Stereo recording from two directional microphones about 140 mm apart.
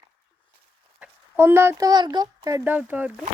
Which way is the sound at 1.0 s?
15° right (ahead or behind).